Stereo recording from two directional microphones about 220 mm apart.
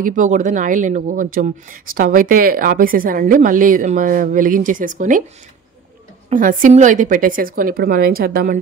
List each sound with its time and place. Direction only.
0.0 s speech: 35° right (ahead or behind)
6.3 s speech: 35° right (ahead or behind)